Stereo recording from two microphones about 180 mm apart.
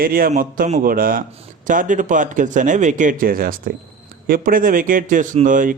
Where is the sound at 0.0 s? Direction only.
55° right (ahead or behind).